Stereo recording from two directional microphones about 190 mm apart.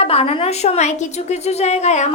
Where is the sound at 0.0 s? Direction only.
30° left (ahead or behind).